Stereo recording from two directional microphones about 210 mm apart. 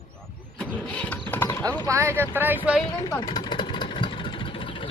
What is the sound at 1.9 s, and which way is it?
Speech, 15° right (ahead or behind).